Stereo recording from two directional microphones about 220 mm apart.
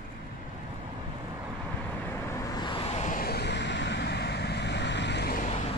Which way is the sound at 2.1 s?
15° left (ahead or behind).